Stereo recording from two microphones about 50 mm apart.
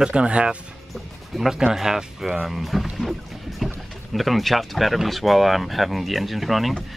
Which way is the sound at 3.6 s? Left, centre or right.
Centre.